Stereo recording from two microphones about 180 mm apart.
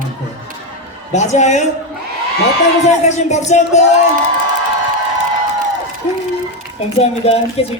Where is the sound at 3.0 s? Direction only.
40° left (ahead or behind).